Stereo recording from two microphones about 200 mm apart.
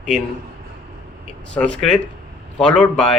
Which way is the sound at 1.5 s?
5° left (ahead or behind).